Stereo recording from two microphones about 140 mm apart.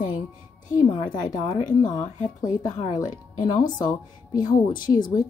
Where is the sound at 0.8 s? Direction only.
35° left (ahead or behind).